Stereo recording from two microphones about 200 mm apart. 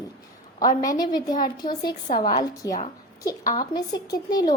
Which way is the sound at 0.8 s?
20° left (ahead or behind).